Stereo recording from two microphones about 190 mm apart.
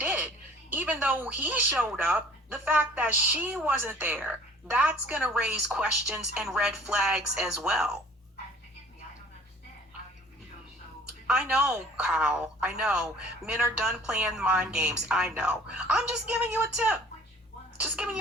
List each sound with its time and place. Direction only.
0.0 s music: 5° right (ahead or behind)
0.7 s speech: 10° right (ahead or behind)
11.3 s speech: 5° right (ahead or behind)